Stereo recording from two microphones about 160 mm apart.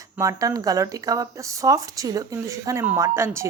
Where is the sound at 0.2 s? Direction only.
20° right (ahead or behind).